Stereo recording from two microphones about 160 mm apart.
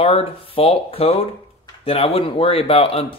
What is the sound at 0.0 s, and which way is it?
A man's voice, 35° left (ahead or behind).